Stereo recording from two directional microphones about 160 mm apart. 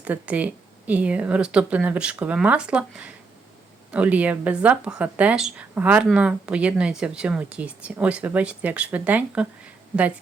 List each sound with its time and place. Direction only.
0.0 s speech: 10° right (ahead or behind)